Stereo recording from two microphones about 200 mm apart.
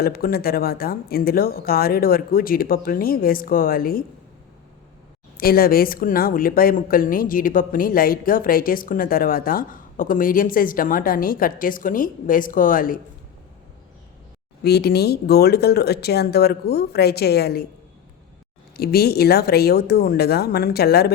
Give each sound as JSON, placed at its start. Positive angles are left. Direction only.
{"t": 0.0, "sound": "a woman's voice", "side_deg": 50}
{"t": 5.4, "sound": "a woman's voice", "side_deg": 50}
{"t": 14.6, "sound": "a woman's voice", "side_deg": 55}
{"t": 18.8, "sound": "a woman's voice", "side_deg": 50}